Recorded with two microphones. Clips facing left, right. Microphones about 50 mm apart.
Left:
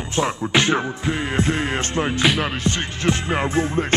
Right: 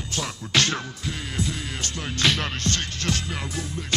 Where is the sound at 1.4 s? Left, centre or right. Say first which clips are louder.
Left 7 dB; left.